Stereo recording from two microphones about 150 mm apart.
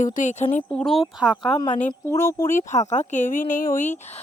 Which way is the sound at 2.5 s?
55° left (ahead or behind).